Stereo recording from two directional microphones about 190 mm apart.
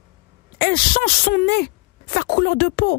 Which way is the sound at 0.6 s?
50° left (ahead or behind).